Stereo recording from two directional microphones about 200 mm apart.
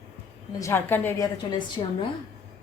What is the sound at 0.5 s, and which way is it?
A woman's voice, 15° left (ahead or behind).